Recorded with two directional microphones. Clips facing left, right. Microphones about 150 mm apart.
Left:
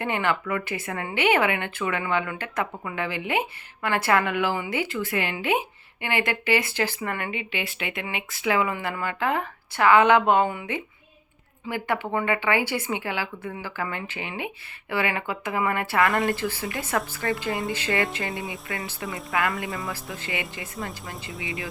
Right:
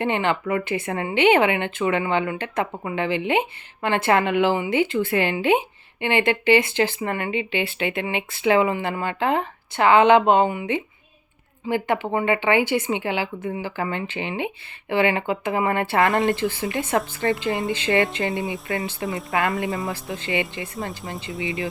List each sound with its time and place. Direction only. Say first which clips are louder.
0.0 s speech: right 3 dB; 25° right (ahead or behind)
18.3 s speech: right 6 dB; centre (ahead or behind)
19.3 s speech: right 3 dB; 25° right (ahead or behind)